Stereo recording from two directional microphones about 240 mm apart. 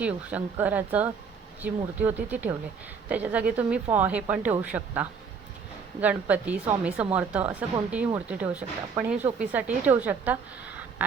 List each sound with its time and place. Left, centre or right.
0.0 s a woman's voice: centre